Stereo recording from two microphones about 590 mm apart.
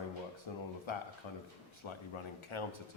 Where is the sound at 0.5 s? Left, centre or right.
Left.